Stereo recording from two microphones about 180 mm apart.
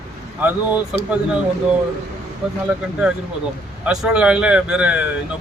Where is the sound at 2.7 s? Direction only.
10° right (ahead or behind).